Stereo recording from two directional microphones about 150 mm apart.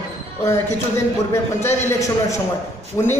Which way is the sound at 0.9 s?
20° left (ahead or behind).